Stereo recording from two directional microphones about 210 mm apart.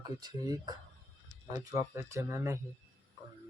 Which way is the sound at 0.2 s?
20° right (ahead or behind).